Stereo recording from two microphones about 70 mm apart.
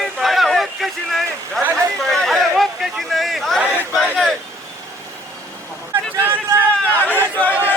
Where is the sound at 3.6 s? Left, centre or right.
Centre.